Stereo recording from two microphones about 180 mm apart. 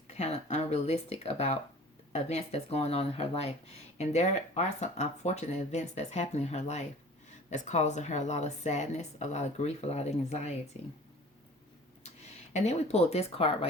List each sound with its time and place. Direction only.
0.1 s speech: 35° left (ahead or behind)
12.5 s speech: 40° left (ahead or behind)